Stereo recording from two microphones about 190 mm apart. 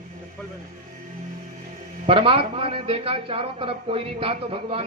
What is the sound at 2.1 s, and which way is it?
A man's voice, 30° right (ahead or behind).